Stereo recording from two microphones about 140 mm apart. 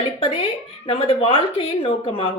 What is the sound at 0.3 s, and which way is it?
A woman's voice, 45° left (ahead or behind).